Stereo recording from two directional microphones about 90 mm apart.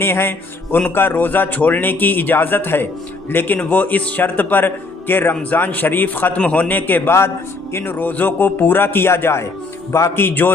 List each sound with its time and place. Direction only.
0.0 s speech: 25° left (ahead or behind)